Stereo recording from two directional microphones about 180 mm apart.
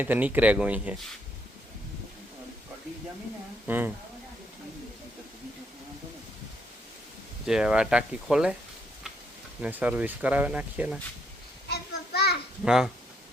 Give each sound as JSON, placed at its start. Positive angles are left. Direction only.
{"t": 0.0, "sound": "speech", "side_deg": -10}
{"t": 3.7, "sound": "speech", "side_deg": -10}
{"t": 7.4, "sound": "speech", "side_deg": -5}
{"t": 9.6, "sound": "speech", "side_deg": -10}
{"t": 11.7, "sound": "a sound", "side_deg": 65}
{"t": 12.6, "sound": "speech", "side_deg": -5}